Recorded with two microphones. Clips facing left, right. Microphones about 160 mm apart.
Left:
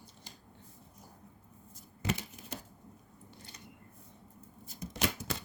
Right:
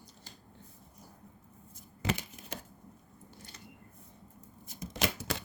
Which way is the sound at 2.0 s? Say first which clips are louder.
Right 1 dB; 90° right.